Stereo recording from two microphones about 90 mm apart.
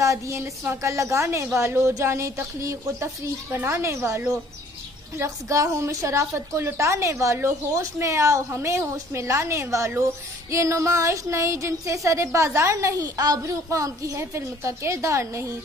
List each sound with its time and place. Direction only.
0.0 s a woman's voice: 35° right (ahead or behind)
5.2 s a woman's voice: 35° right (ahead or behind)